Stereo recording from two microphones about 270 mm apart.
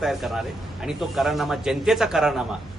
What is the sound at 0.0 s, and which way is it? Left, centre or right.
A man's voice, centre.